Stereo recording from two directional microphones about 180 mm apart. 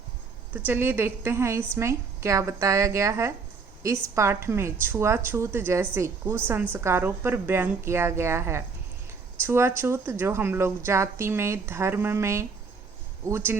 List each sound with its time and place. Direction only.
0.5 s speech: 10° right (ahead or behind)